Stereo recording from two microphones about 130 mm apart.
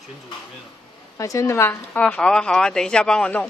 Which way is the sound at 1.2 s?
25° left (ahead or behind).